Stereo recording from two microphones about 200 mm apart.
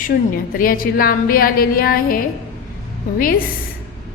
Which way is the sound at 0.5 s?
45° left (ahead or behind).